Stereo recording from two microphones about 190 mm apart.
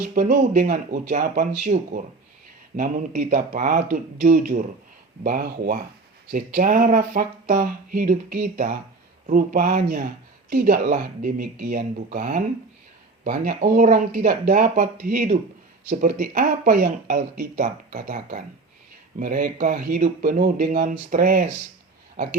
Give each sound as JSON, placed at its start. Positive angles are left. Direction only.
{"t": 0.1, "sound": "speech", "side_deg": -45}